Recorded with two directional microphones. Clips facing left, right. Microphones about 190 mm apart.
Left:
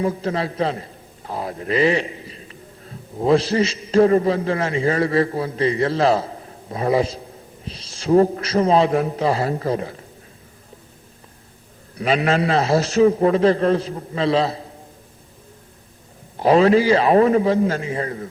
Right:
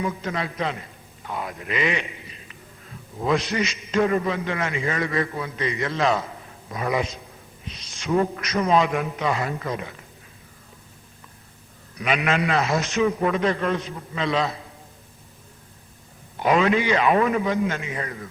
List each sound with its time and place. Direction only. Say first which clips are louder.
0.0 s a man's voice: left 5 dB; 35° left (ahead or behind)
11.9 s a man's voice: left 5 dB; 30° left (ahead or behind)
16.4 s a man's voice: left 6 dB; 35° left (ahead or behind)